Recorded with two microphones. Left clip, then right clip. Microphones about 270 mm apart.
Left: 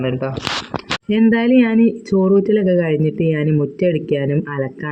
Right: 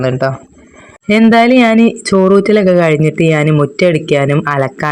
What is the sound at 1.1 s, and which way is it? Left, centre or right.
Speech, centre.